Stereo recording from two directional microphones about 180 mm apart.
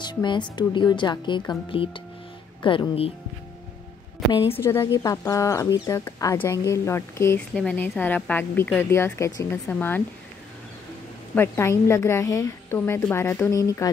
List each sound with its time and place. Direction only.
0.0 s a woman's voice: 25° left (ahead or behind)
4.3 s a woman's voice: 25° left (ahead or behind)
11.3 s a woman's voice: 15° left (ahead or behind)